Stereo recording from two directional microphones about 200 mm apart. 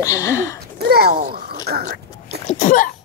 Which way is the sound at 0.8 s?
50° right (ahead or behind).